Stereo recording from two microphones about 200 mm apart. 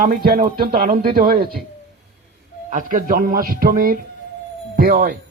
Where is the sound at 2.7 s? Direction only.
40° right (ahead or behind).